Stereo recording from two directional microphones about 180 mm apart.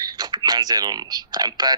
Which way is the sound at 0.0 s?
25° right (ahead or behind).